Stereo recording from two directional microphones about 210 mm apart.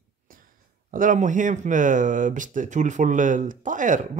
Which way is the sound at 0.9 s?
40° right (ahead or behind).